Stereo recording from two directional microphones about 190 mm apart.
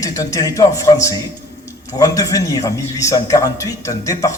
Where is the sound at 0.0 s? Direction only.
15° left (ahead or behind).